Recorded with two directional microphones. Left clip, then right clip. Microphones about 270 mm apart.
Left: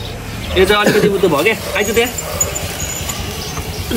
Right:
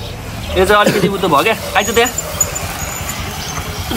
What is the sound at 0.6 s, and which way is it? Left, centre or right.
A man's voice, centre.